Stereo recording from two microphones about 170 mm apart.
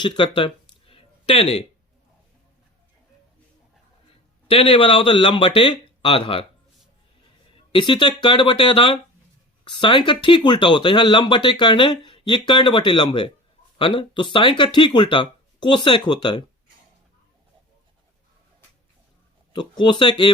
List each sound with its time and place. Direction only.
0.0 s a sound: 30° left (ahead or behind)
4.4 s speech: 35° left (ahead or behind)
7.5 s speech: 30° left (ahead or behind)
19.5 s speech: 25° left (ahead or behind)